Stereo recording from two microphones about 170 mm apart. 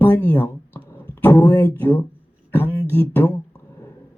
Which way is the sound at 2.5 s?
10° left (ahead or behind).